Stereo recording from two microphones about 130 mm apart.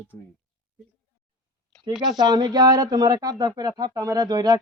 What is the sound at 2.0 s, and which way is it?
Speech, 35° right (ahead or behind).